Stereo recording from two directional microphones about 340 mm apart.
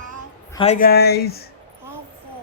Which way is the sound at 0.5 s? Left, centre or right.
Centre.